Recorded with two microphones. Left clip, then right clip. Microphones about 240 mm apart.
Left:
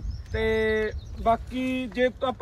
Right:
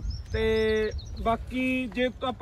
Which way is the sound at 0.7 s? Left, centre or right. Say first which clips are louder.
Left 1 dB; centre.